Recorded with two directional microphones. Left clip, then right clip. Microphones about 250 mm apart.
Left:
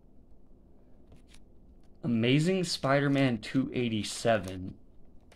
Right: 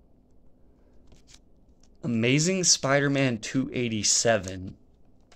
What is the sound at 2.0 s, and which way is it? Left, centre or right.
Speech, centre.